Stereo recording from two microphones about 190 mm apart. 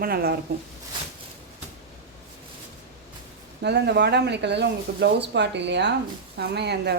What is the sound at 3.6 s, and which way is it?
Speech, 65° right (ahead or behind).